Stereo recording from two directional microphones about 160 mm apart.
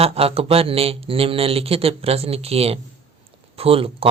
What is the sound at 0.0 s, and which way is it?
Speech, 40° right (ahead or behind).